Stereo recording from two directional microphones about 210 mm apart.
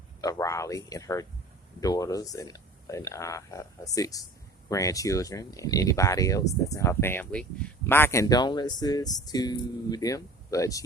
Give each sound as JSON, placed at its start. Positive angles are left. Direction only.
{"t": 0.2, "sound": "speech", "side_deg": 15}